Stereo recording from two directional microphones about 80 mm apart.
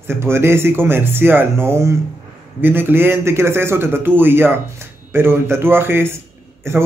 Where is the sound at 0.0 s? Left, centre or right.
Right.